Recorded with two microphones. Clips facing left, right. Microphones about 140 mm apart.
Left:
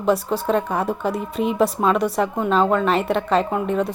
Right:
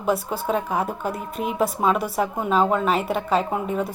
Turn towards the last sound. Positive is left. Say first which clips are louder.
# left 3 dB
turn(degrees=-5)  # may be behind; listen again after turning